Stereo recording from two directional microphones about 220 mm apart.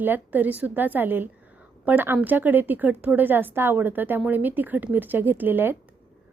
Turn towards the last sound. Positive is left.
turn(degrees=-10)  # may be behind; listen again after turning